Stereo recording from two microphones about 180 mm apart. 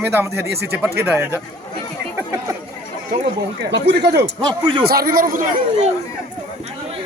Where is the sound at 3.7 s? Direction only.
70° right (ahead or behind).